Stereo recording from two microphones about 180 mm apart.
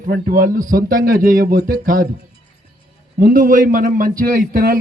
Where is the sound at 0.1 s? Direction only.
55° right (ahead or behind).